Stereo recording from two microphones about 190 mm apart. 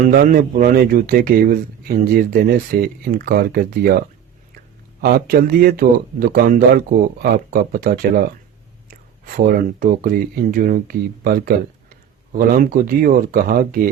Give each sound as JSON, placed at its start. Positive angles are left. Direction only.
{"t": 0.1, "sound": "speech", "side_deg": -50}